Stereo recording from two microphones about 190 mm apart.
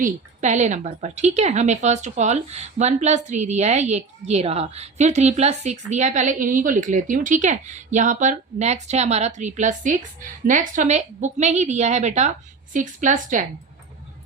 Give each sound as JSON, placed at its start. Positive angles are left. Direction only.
{"t": 0.0, "sound": "a woman's voice", "side_deg": -40}